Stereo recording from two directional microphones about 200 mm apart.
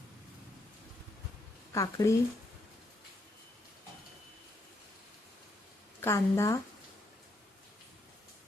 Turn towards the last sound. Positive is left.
turn(degrees=15)  # may be behind; listen again after turning